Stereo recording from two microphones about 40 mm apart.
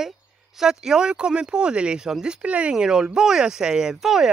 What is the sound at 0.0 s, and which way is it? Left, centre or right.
Speech, centre.